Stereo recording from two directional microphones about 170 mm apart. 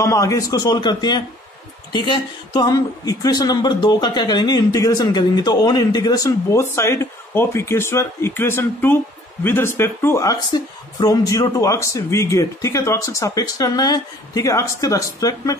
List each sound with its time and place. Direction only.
0.0 s speech: 20° left (ahead or behind)